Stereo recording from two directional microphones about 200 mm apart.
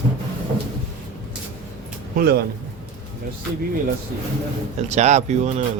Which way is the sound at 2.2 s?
50° right (ahead or behind).